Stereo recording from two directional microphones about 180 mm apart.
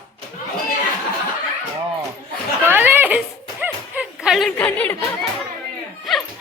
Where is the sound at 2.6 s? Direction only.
10° right (ahead or behind).